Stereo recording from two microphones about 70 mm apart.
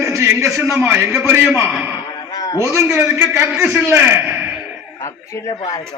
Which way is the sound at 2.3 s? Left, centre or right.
Left.